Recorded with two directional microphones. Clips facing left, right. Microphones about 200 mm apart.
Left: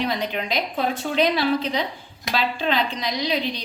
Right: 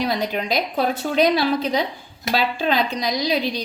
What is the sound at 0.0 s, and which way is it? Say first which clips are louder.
A woman's voice: right 2 dB; 40° right (ahead or behind).